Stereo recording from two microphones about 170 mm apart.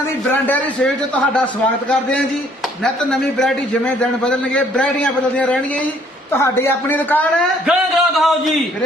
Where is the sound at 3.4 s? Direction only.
5° left (ahead or behind).